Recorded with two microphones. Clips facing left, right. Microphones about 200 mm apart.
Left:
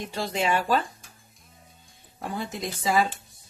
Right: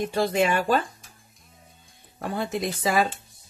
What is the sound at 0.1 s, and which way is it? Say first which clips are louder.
Cutlery: right 2 dB; 50° right (ahead or behind).